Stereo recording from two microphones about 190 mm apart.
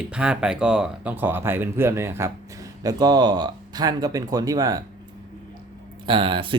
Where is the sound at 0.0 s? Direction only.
5° right (ahead or behind).